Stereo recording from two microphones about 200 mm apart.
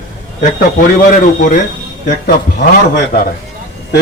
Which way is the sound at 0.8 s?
40° left (ahead or behind).